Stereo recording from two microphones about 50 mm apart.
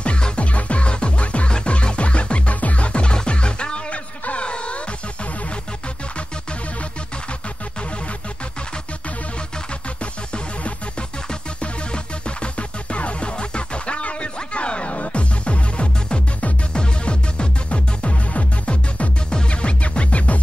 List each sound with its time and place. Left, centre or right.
0.0 s music: left
10.3 s music: centre